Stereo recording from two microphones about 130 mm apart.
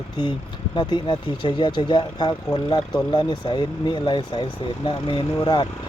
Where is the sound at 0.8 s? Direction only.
35° left (ahead or behind).